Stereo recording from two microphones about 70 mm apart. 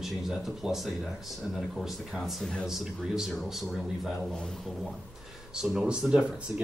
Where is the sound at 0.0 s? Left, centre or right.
Centre.